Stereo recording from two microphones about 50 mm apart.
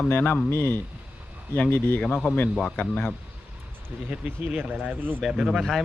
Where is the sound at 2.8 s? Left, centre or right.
Left.